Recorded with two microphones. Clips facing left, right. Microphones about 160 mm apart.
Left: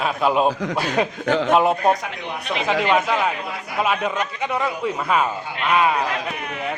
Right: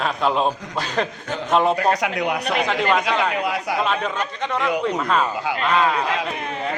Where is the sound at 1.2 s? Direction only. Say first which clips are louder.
Left 8 dB; 90° left.